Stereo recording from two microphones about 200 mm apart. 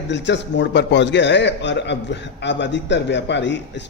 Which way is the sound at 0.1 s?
60° left (ahead or behind).